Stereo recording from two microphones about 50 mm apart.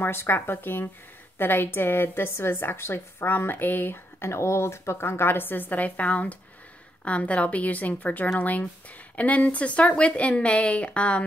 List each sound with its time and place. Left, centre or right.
0.0 s a woman's voice: left